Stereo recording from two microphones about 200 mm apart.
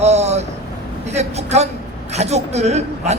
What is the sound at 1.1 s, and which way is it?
A man's voice, 35° right (ahead or behind).